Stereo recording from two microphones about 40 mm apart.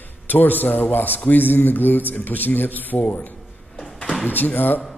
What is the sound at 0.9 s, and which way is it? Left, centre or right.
A man's voice, left.